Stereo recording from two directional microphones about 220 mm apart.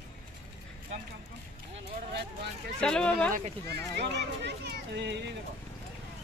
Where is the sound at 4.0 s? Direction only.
50° right (ahead or behind).